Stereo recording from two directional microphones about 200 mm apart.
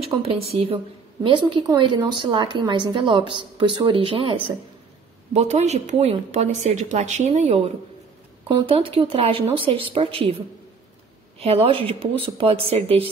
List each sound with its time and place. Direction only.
0.0 s a woman's voice: 30° right (ahead or behind)
11.3 s a woman's voice: 30° right (ahead or behind)